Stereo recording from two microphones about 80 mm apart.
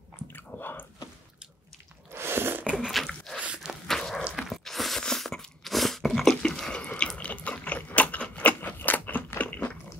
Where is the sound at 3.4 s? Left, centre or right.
Centre.